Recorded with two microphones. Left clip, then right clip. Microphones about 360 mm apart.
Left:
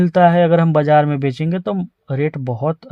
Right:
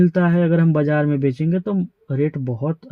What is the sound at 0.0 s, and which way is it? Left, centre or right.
Speech, centre.